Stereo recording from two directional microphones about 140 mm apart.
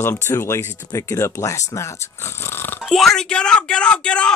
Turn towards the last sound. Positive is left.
turn(degrees=5)  # may be behind; listen again after turning